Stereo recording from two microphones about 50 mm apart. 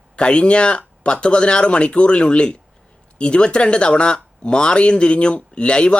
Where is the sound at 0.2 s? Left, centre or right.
Centre.